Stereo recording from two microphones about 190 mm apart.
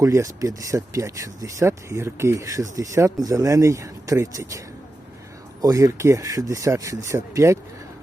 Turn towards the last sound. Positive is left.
turn(degrees=-15)  # may be behind; listen again after turning